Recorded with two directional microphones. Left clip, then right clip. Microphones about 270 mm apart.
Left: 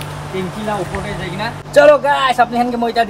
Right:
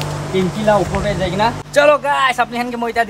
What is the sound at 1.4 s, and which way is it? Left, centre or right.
A man's voice, centre.